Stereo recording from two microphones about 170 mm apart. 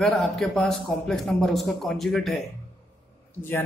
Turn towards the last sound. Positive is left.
turn(degrees=15)  # may be behind; listen again after turning